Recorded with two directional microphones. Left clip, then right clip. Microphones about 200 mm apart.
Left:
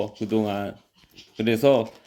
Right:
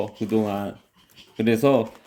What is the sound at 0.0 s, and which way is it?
Speech, 5° left (ahead or behind).